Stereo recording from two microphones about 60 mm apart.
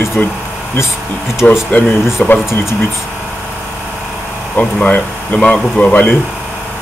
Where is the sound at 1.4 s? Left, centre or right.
Left.